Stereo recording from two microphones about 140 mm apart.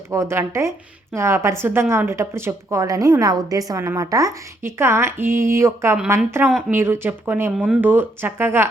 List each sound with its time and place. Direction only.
0.1 s a woman's voice: 20° right (ahead or behind)